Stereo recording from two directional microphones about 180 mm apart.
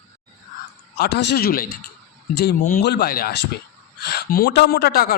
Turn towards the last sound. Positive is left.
turn(degrees=60)  # may be behind; listen again after turning